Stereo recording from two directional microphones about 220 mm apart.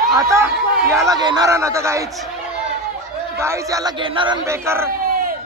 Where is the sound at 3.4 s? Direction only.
15° right (ahead or behind).